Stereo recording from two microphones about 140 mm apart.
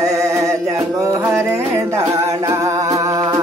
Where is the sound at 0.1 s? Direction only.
25° right (ahead or behind).